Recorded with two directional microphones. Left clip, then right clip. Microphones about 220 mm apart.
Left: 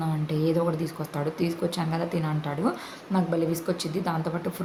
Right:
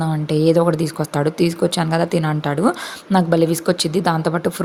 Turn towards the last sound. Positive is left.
turn(degrees=-35)  # may be behind; listen again after turning